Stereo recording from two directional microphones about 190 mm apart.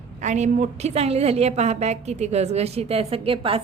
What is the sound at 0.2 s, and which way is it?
A woman's voice, 40° right (ahead or behind).